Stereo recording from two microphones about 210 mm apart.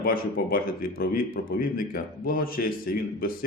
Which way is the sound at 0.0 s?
45° left (ahead or behind).